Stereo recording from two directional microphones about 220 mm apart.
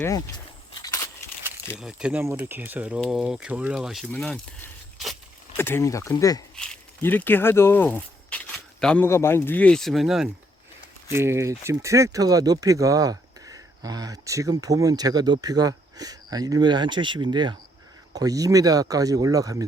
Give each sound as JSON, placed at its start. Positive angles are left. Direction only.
{"t": 0.7, "sound": "crushing", "side_deg": 15}
{"t": 1.7, "sound": "speech", "side_deg": -5}
{"t": 11.1, "sound": "speech", "side_deg": -10}